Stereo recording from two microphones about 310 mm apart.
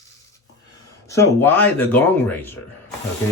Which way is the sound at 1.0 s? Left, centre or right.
Centre.